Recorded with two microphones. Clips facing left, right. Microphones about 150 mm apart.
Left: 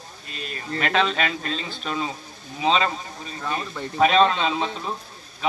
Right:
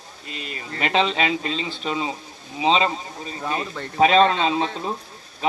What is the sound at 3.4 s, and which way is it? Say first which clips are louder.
Speech: right 2 dB; 15° right (ahead or behind).